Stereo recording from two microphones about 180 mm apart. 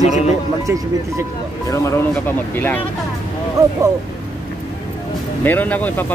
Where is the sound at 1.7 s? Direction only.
15° left (ahead or behind).